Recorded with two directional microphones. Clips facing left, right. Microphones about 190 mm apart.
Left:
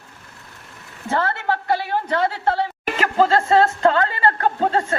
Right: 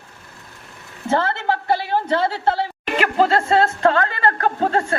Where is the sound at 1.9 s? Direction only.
25° right (ahead or behind).